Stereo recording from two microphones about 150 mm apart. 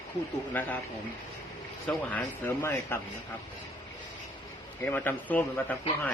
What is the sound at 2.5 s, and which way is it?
Speech, 20° left (ahead or behind).